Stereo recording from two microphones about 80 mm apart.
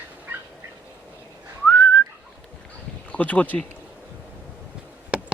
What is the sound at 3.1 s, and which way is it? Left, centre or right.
Speech, centre.